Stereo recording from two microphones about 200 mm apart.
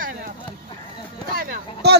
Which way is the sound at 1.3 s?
45° right (ahead or behind).